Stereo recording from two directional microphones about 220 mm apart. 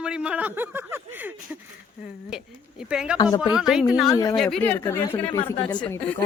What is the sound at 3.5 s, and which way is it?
Speech, centre (ahead or behind).